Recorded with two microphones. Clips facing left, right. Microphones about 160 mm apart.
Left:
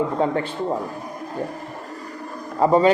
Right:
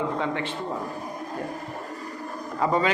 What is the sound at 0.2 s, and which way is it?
Speech, 40° left (ahead or behind).